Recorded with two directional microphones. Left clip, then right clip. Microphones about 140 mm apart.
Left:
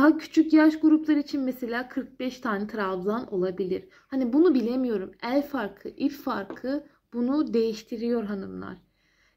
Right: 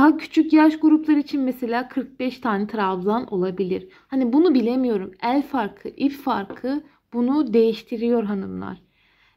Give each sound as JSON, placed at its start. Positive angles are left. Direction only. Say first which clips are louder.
{"t": 0.0, "sound": "a woman's voice", "louder": "right 4 dB", "side_deg": -50}